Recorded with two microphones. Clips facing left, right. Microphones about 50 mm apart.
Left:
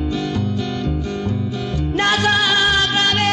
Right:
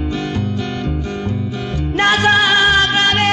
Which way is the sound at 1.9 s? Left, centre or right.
Right.